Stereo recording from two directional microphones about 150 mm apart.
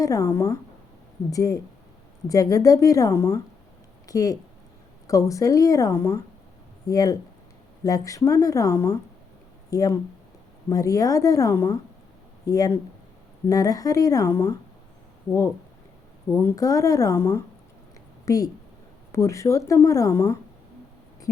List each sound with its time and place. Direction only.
0.0 s speech: 20° left (ahead or behind)
16.3 s speech: 20° left (ahead or behind)